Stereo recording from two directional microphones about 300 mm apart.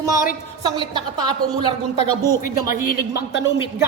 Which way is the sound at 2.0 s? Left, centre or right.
Centre.